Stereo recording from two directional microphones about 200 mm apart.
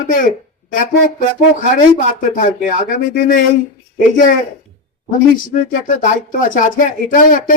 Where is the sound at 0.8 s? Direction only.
45° left (ahead or behind).